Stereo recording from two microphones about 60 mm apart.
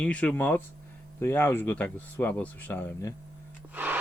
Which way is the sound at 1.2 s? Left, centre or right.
Left.